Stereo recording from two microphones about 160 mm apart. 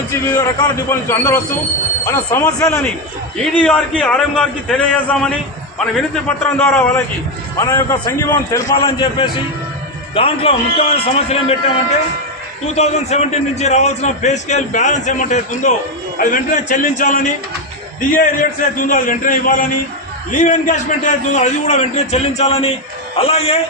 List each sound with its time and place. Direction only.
0.9 s a man's voice: 15° left (ahead or behind)
10.2 s a man's voice: 35° left (ahead or behind)